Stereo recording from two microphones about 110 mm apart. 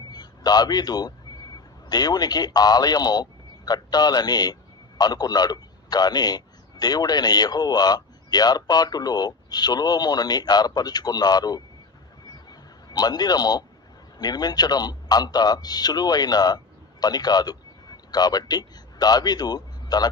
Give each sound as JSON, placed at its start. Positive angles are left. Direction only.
{"t": 0.1, "sound": "a man's voice", "side_deg": 40}
{"t": 12.5, "sound": "a sound", "side_deg": 35}
{"t": 14.2, "sound": "a man's voice", "side_deg": 40}